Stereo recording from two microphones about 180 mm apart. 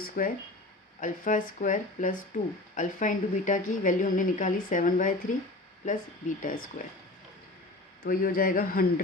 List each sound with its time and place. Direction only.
0.0 s speech: 50° left (ahead or behind)
8.0 s speech: 55° left (ahead or behind)